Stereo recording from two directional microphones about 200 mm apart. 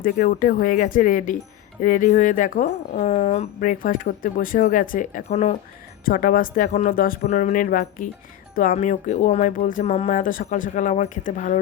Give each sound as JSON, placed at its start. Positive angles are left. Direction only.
{"t": 0.0, "sound": "a woman's voice", "side_deg": 45}